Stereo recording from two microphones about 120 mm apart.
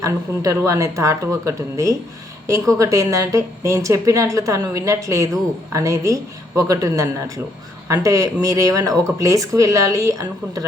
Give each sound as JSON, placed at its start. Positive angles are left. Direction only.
{"t": 0.0, "sound": "a woman's voice", "side_deg": -25}